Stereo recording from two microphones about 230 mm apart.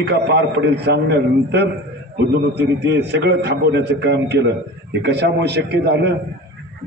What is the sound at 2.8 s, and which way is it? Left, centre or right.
A man's voice, right.